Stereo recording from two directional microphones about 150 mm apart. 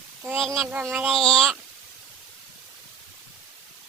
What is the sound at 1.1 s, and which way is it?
Speech, 5° left (ahead or behind).